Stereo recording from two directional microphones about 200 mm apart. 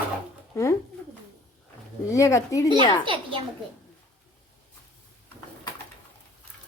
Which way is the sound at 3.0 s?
25° right (ahead or behind).